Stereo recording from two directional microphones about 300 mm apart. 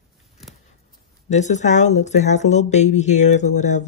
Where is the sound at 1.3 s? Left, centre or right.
Left.